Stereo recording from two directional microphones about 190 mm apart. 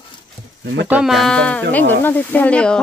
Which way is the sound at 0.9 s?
5° right (ahead or behind).